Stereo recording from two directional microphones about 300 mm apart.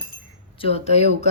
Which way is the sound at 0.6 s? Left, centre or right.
Left.